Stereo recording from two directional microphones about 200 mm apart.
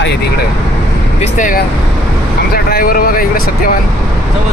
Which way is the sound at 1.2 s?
40° left (ahead or behind).